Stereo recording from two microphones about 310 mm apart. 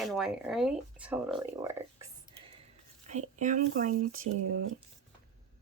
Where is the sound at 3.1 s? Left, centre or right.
Right.